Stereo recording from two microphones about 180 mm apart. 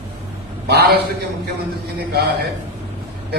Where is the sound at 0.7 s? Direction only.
65° right (ahead or behind).